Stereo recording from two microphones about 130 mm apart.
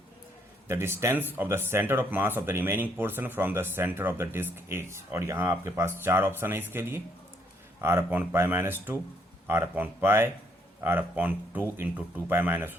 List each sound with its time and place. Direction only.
0.7 s speech: 20° right (ahead or behind)